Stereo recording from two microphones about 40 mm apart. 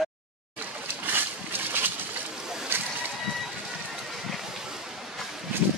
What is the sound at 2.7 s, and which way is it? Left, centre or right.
Slosh, right.